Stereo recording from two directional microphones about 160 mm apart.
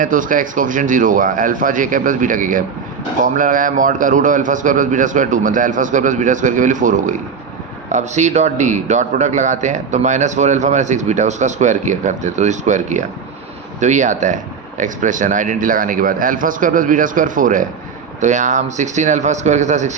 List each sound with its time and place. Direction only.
0.0 s a man's voice: 55° right (ahead or behind)